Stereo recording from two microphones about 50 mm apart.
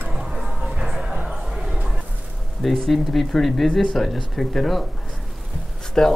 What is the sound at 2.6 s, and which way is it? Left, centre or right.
Speech, centre.